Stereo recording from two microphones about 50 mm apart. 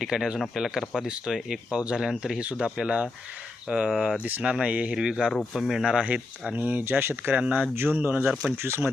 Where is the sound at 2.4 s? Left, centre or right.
Right.